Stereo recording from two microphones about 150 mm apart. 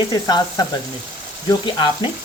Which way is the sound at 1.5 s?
30° left (ahead or behind).